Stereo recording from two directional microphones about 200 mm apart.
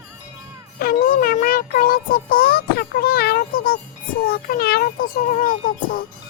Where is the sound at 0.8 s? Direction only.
45° left (ahead or behind).